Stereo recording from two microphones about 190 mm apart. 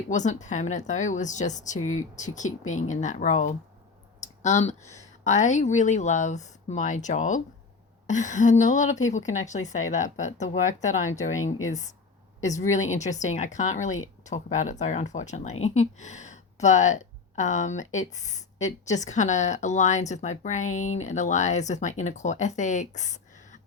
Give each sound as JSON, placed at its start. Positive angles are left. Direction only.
{"t": 0.1, "sound": "speech", "side_deg": 40}
{"t": 12.7, "sound": "speech", "side_deg": 40}